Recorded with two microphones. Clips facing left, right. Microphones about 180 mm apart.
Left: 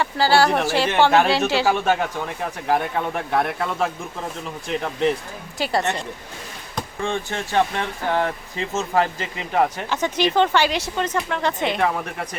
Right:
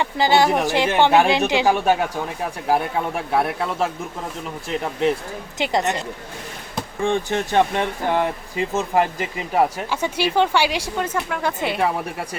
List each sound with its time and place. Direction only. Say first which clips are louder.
0.0 s speech: even; 20° right (ahead or behind)
5.5 s speech: right 1 dB; 20° right (ahead or behind)